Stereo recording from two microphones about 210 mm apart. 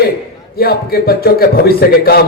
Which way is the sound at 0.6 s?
45° left (ahead or behind).